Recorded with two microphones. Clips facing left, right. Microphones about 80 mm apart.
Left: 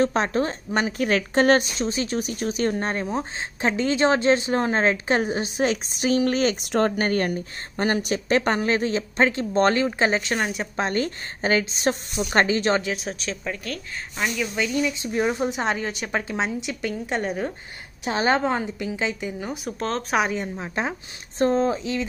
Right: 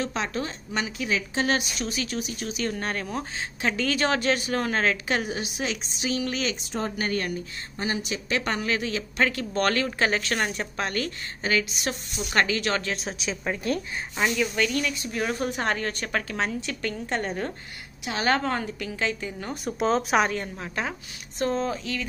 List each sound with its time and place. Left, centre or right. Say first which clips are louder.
0.0 s a woman's voice: left 7 dB; left
1.8 s speech: left 5 dB; left
6.6 s speech: left 9 dB; left
7.0 s a woman's voice: left 5 dB; left
10.4 s a woman's voice: left 2 dB; centre
10.8 s a woman's voice: left 6 dB; left
12.9 s speech: left 1 dB; centre
13.4 s a woman's voice: right 3 dB; right
14.1 s speech: right 1 dB; centre
14.6 s a woman's voice: left 2 dB; centre
18.0 s speech: left 3 dB; left
19.8 s speech: right 2 dB; centre
20.2 s speech: left 2 dB; centre
21.4 s speech: left 6 dB; left